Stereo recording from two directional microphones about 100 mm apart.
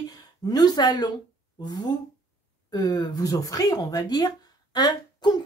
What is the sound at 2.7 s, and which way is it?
Speech, 40° left (ahead or behind).